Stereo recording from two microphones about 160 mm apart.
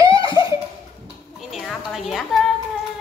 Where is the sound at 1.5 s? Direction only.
Centre (ahead or behind).